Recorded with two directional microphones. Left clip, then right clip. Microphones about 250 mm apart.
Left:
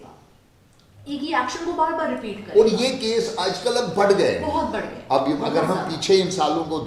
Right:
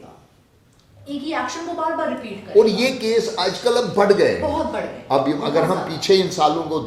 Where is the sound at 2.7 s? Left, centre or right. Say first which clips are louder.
Right 3 dB; left.